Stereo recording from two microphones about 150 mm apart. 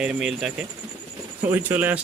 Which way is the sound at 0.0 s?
5° right (ahead or behind).